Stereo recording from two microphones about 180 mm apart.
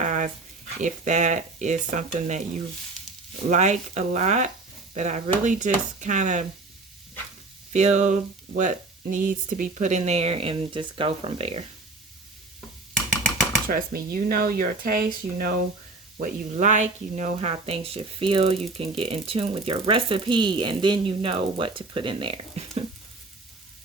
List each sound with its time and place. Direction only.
0.0 s a sound: 45° right (ahead or behind)
0.8 s speech: 45° right (ahead or behind)
3.5 s speech: 40° right (ahead or behind)
7.7 s speech: 40° right (ahead or behind)
13.7 s speech: 50° right (ahead or behind)
16.2 s speech: 45° right (ahead or behind)